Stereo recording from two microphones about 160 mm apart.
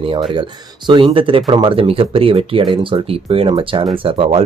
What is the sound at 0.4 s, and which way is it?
Speech, 30° right (ahead or behind).